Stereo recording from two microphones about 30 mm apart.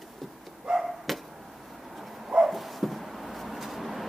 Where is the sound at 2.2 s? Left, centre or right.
Centre.